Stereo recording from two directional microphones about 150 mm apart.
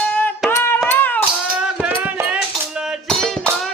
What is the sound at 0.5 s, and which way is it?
Music, 15° left (ahead or behind).